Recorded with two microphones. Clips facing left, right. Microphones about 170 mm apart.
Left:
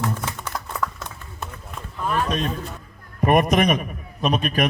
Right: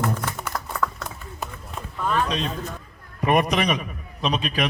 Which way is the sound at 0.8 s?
5° left (ahead or behind).